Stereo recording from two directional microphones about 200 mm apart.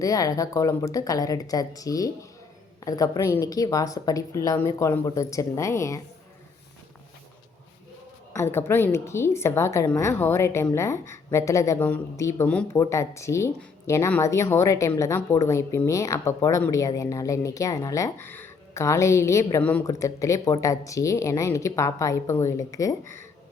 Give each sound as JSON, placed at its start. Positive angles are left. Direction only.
{"t": 0.0, "sound": "a woman's voice", "side_deg": 15}
{"t": 8.4, "sound": "a woman's voice", "side_deg": 10}